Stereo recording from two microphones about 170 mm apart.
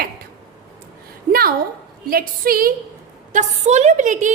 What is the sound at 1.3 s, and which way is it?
A woman's voice, 60° right (ahead or behind).